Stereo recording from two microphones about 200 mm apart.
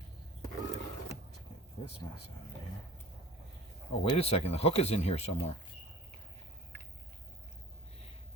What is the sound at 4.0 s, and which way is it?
Speech, 30° left (ahead or behind).